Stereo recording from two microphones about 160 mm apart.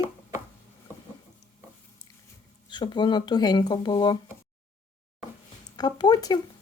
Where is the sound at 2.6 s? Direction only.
30° left (ahead or behind).